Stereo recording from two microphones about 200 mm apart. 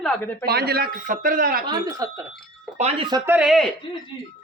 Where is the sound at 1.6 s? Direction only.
20° right (ahead or behind).